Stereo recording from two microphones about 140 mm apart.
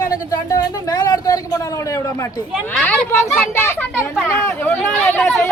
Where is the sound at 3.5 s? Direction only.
15° left (ahead or behind).